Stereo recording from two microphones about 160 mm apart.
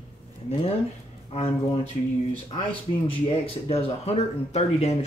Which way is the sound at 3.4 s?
40° left (ahead or behind).